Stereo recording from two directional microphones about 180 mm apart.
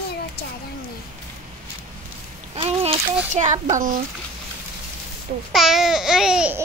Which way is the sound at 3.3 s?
40° right (ahead or behind).